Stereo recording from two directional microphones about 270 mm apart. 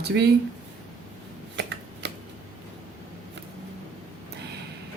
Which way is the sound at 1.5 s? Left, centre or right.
Right.